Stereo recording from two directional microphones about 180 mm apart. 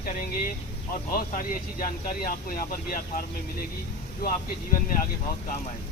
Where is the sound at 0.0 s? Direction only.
50° left (ahead or behind).